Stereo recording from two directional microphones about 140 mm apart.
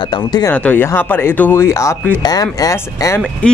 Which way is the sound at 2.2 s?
25° left (ahead or behind).